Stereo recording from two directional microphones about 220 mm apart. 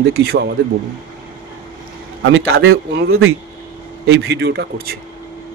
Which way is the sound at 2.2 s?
65° right (ahead or behind).